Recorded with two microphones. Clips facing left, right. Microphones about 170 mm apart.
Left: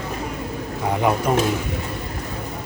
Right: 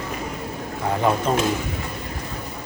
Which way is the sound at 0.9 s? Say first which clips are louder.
Left 1 dB; 15° left (ahead or behind).